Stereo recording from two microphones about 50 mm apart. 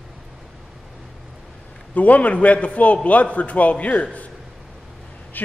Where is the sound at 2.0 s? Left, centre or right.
Left.